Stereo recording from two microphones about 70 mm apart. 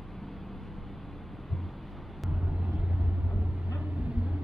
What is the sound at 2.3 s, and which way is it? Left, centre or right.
Vehicle, centre.